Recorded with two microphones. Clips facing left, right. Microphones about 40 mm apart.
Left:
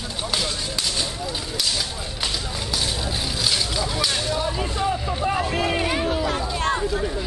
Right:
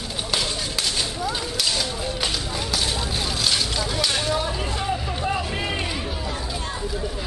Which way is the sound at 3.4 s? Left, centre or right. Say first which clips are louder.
Left 1 dB; centre.